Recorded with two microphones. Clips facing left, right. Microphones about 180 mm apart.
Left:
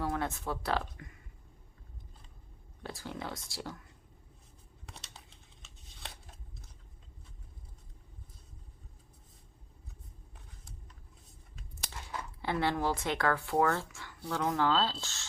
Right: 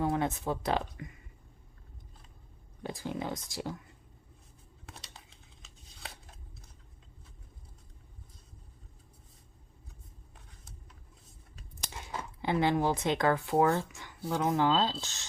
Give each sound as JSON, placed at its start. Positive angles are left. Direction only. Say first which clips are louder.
{"t": 0.0, "sound": "speech", "louder": "right 4 dB", "side_deg": -20}
{"t": 2.8, "sound": "speech", "louder": "right 5 dB", "side_deg": -20}
{"t": 4.9, "sound": "tearing", "louder": "right 1 dB", "side_deg": 0}
{"t": 11.9, "sound": "speech", "louder": "right 2 dB", "side_deg": -20}